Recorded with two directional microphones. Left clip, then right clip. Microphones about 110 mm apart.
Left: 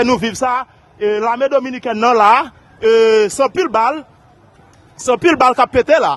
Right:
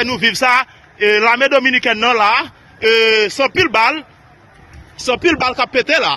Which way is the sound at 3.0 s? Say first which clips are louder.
Left 2 dB; 60° left (ahead or behind).